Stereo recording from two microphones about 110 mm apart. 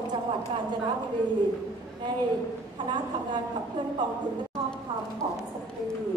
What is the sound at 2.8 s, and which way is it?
A woman's voice, 45° right (ahead or behind).